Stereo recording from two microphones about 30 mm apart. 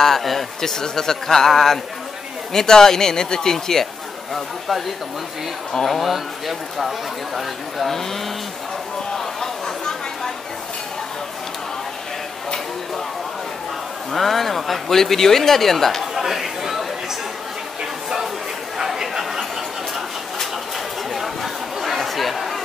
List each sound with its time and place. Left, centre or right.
0.0 s speech: centre
4.3 s speech: centre
5.9 s speech: centre
7.9 s speech: centre
9.1 s a sound: centre
14.1 s speech: centre
16.2 s chatter: centre
18.9 s a sound: centre
21.1 s chatter: centre